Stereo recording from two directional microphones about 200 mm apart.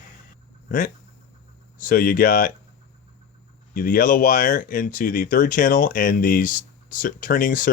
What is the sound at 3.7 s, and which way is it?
Speech, 45° left (ahead or behind).